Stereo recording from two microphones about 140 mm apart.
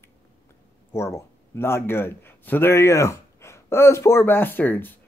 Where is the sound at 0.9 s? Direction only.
20° left (ahead or behind).